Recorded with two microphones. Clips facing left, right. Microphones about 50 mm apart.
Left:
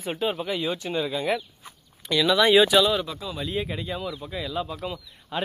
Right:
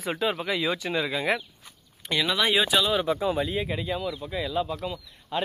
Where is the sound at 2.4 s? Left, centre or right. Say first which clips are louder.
Left 6 dB; centre.